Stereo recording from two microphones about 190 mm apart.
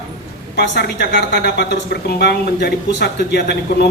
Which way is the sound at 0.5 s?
60° left (ahead or behind).